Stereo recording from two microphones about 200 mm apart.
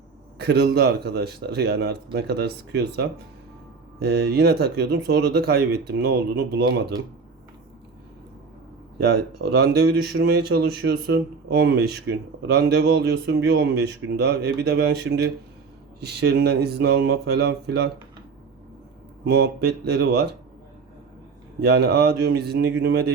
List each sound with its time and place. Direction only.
0.3 s speech: 55° right (ahead or behind)
9.0 s speech: 55° right (ahead or behind)
19.2 s speech: 55° right (ahead or behind)
21.6 s speech: 50° right (ahead or behind)